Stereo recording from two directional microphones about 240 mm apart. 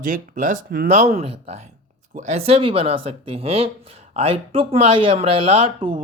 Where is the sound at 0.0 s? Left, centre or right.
Right.